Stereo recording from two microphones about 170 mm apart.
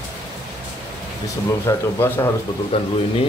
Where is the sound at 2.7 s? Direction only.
35° left (ahead or behind).